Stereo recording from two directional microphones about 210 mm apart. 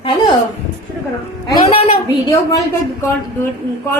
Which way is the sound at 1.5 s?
25° left (ahead or behind).